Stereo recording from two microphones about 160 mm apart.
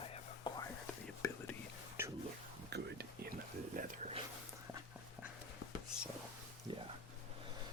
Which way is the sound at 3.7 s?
55° right (ahead or behind).